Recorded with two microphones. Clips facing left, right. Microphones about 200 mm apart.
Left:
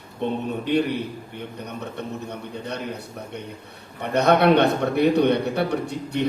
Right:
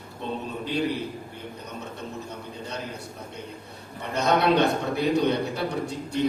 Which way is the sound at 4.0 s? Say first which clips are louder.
Left 5 dB; 60° left (ahead or behind).